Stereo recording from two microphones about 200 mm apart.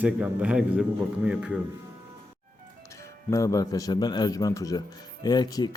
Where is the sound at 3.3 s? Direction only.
15° left (ahead or behind).